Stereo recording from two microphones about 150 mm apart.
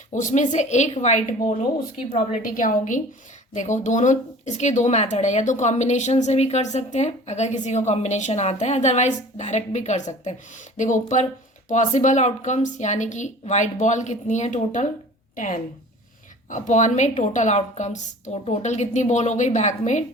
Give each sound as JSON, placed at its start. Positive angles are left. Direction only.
{"t": 0.1, "sound": "a woman's voice", "side_deg": 55}